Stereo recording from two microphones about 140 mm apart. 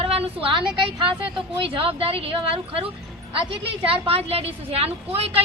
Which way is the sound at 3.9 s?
45° right (ahead or behind).